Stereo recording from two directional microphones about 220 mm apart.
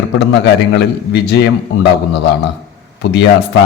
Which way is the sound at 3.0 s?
50° left (ahead or behind).